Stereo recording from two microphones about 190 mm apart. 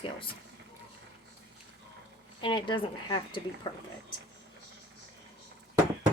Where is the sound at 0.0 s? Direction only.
25° left (ahead or behind).